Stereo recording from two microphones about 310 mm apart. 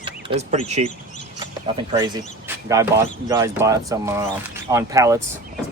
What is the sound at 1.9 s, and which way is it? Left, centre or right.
Speech, centre.